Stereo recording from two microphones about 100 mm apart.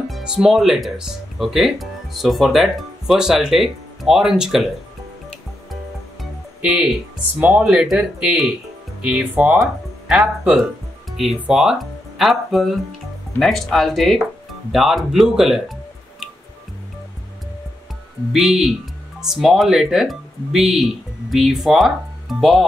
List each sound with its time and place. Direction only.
0.1 s speech: 5° right (ahead or behind)
6.6 s speech: 10° right (ahead or behind)
18.3 s speech: centre (ahead or behind)